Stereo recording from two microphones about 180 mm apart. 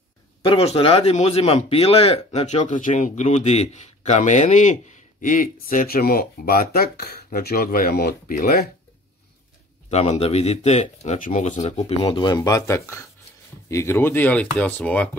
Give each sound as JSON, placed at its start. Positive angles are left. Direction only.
{"t": 0.4, "sound": "a man's voice", "side_deg": 30}
{"t": 9.8, "sound": "a man's voice", "side_deg": 35}
{"t": 12.0, "sound": "speech", "side_deg": 25}